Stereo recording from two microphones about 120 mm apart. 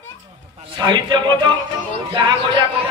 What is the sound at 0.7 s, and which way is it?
A man's voice, 40° right (ahead or behind).